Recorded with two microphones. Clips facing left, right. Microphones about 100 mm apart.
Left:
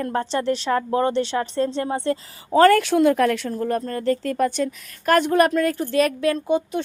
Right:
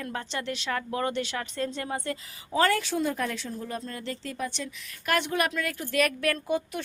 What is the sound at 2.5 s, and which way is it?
Speech, 45° left (ahead or behind).